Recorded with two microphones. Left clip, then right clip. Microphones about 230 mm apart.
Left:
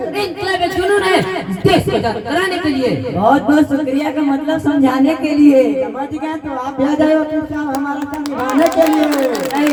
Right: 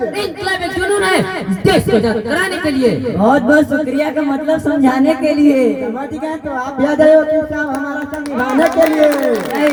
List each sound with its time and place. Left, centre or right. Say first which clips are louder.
0.2 s a woman's voice: left 1 dB; right
6.8 s a woman's voice: right 5 dB; right
8.7 s a sound: right 2 dB; left